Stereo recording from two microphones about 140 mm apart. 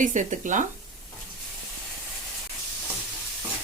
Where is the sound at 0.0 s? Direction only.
60° right (ahead or behind).